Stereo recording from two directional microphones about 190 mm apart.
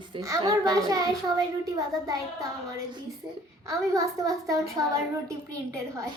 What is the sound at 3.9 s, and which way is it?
Speech, 20° right (ahead or behind).